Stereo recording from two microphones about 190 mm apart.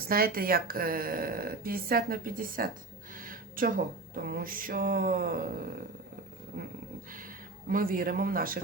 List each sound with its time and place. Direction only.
0.1 s speech: 50° right (ahead or behind)
7.7 s speech: 50° right (ahead or behind)